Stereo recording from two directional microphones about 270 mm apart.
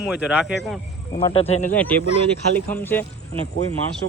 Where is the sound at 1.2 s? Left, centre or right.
Left.